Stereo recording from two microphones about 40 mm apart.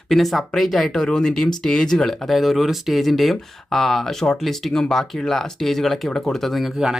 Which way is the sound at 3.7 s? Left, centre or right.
Centre.